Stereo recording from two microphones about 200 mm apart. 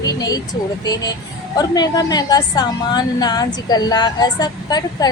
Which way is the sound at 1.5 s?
20° left (ahead or behind).